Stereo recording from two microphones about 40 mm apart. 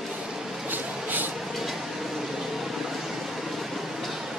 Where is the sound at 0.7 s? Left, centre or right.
Right.